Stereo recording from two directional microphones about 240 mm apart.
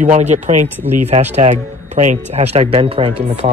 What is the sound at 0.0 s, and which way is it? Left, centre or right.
Speech, right.